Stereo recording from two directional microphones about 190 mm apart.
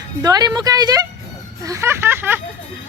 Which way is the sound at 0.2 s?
20° right (ahead or behind).